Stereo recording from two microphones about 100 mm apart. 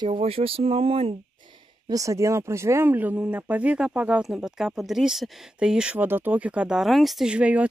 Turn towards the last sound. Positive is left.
turn(degrees=-10)  # may be behind; listen again after turning